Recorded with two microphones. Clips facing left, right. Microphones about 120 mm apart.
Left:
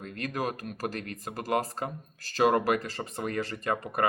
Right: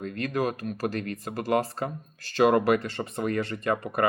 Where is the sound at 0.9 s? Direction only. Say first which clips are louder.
Right 6 dB; 40° right (ahead or behind).